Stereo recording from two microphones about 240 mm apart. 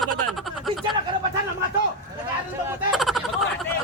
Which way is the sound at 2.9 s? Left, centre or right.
Centre.